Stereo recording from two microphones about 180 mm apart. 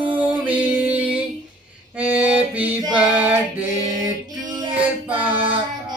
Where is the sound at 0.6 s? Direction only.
10° right (ahead or behind).